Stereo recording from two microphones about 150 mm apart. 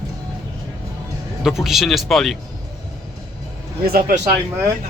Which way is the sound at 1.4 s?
Centre (ahead or behind).